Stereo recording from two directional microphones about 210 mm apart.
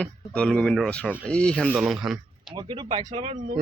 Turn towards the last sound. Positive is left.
turn(degrees=-30)  # may be behind; listen again after turning